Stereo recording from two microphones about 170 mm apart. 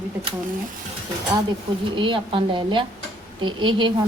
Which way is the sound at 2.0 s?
30° right (ahead or behind).